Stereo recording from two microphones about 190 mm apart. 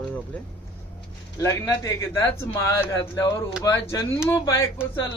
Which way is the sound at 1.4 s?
15° left (ahead or behind).